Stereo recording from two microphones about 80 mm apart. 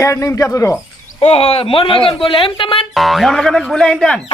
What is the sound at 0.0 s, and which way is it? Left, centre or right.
Speech, left.